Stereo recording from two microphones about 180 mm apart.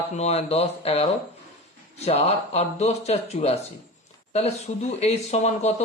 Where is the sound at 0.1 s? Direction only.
35° left (ahead or behind).